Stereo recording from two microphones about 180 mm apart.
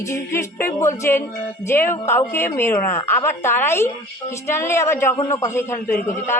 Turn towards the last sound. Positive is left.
turn(degrees=10)  # may be behind; listen again after turning